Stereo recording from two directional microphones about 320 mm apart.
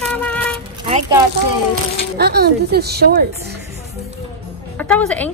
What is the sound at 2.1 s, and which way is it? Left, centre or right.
A woman's voice, right.